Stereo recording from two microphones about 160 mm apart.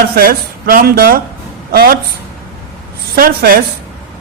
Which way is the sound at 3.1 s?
65° right (ahead or behind).